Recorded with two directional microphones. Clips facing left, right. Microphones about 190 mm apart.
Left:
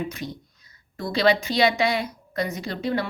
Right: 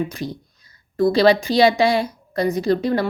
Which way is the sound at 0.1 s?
35° right (ahead or behind).